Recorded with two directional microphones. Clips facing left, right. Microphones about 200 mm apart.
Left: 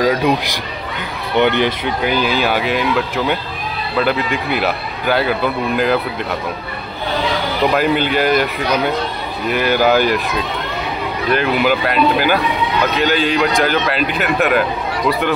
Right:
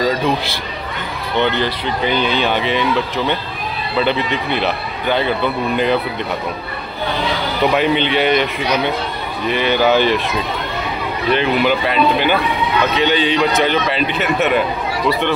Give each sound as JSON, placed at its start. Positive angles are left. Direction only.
{"t": 0.0, "sound": "a man's voice", "side_deg": 15}
{"t": 1.4, "sound": "speech", "side_deg": 15}
{"t": 7.6, "sound": "speech", "side_deg": 0}
{"t": 11.2, "sound": "speech", "side_deg": 5}
{"t": 12.9, "sound": "speech", "side_deg": 5}